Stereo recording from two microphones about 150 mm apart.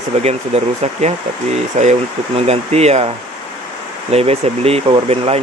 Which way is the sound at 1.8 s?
45° right (ahead or behind).